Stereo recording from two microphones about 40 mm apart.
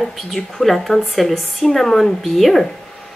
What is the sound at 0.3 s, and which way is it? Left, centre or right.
Speech, centre.